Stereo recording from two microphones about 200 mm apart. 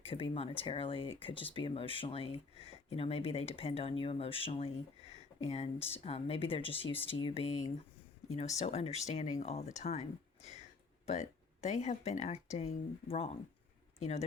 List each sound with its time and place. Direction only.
0.0 s speech: 30° left (ahead or behind)